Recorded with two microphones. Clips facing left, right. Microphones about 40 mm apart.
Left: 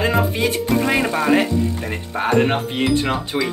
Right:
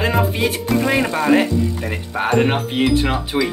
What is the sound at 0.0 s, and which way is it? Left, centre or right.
Speech, centre.